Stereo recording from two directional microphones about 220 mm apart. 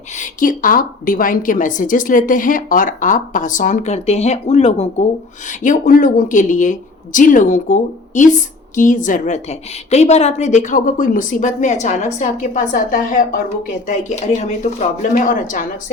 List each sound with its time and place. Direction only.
0.2 s a woman's voice: 35° left (ahead or behind)